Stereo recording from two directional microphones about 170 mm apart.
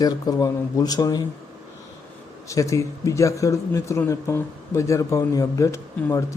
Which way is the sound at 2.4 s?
20° left (ahead or behind).